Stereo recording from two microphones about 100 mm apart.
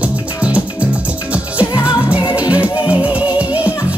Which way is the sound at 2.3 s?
15° right (ahead or behind).